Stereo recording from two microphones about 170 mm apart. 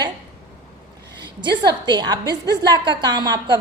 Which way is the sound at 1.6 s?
25° right (ahead or behind).